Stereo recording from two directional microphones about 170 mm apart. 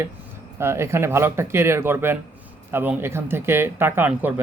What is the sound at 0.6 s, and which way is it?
Speech, 15° right (ahead or behind).